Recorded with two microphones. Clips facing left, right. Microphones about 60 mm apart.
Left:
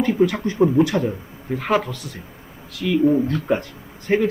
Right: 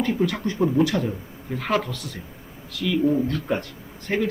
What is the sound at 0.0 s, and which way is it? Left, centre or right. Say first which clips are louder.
Speech: left 5 dB; centre.